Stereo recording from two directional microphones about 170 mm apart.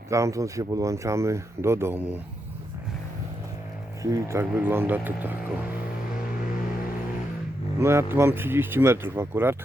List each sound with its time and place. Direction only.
0.1 s speech: 20° right (ahead or behind)
4.0 s speech: 15° right (ahead or behind)
7.8 s speech: 15° right (ahead or behind)